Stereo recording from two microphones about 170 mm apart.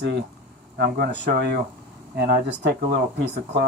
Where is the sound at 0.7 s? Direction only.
70° right (ahead or behind).